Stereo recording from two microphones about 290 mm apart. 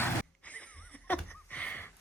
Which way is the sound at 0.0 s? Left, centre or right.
Centre.